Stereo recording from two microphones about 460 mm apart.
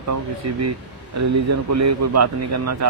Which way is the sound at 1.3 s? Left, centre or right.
Right.